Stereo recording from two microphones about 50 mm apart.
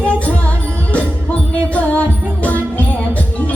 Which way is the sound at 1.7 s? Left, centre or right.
Left.